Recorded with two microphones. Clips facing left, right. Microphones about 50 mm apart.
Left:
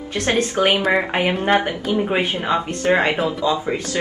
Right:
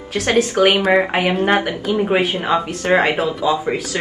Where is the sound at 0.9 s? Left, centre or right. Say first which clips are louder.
Right 3 dB; centre.